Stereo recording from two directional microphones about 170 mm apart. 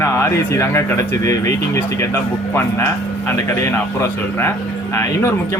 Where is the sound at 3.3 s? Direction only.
15° left (ahead or behind).